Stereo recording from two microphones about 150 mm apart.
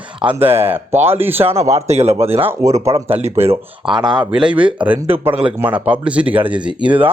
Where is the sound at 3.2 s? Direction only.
45° right (ahead or behind).